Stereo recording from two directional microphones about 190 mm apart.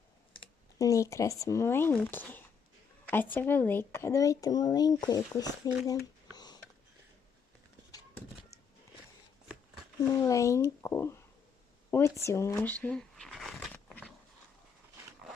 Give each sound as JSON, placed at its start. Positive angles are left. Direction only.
{"t": 0.3, "sound": "a child's voice", "side_deg": 15}
{"t": 6.3, "sound": "a sound", "side_deg": 20}
{"t": 10.2, "sound": "a child's voice", "side_deg": 15}